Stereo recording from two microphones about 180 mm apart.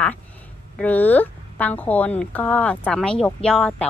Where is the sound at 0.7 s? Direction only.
10° left (ahead or behind).